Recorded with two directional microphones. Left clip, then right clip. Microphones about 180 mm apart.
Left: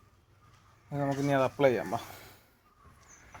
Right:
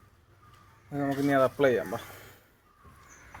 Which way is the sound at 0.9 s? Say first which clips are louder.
Right 2 dB; 40° left (ahead or behind).